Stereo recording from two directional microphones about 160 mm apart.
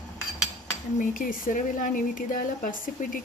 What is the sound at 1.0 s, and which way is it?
Speech, 60° left (ahead or behind).